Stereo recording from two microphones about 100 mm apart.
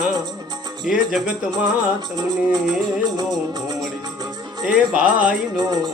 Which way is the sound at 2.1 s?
40° right (ahead or behind).